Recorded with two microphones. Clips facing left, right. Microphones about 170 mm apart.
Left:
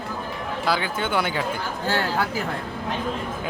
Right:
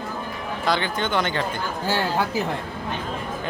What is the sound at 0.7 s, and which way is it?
Speech, 5° left (ahead or behind).